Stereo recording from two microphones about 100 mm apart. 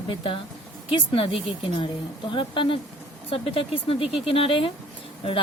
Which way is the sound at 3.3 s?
75° left (ahead or behind).